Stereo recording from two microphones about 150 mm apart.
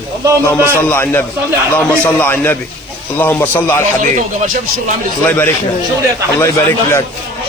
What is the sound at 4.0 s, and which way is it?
Speech, 55° right (ahead or behind).